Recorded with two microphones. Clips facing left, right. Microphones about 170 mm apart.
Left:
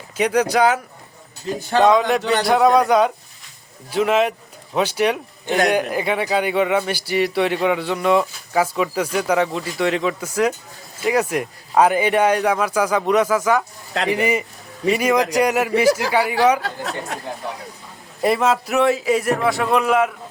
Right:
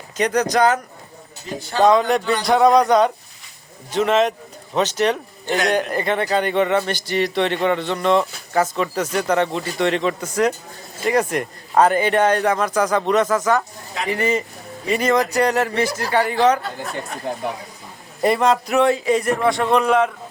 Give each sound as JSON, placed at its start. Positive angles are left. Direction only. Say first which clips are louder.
{"t": 0.2, "sound": "a man's voice", "louder": "left 1 dB", "side_deg": 10}
{"t": 1.9, "sound": "a man's voice", "louder": "even", "side_deg": 5}
{"t": 16.6, "sound": "speech", "louder": "left 1 dB", "side_deg": 90}
{"t": 18.2, "sound": "a man's voice", "louder": "right 1 dB", "side_deg": 0}